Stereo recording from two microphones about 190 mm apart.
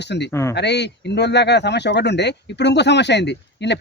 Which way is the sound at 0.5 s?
65° left (ahead or behind).